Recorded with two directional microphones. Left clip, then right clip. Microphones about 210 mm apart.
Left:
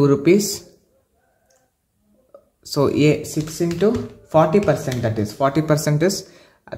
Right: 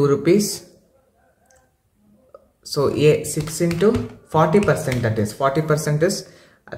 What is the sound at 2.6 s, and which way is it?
Speech, 30° left (ahead or behind).